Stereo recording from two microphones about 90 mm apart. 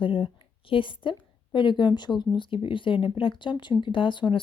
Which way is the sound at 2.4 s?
70° left (ahead or behind).